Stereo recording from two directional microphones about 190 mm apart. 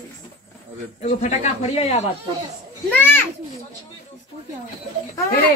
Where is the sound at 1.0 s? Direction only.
35° left (ahead or behind).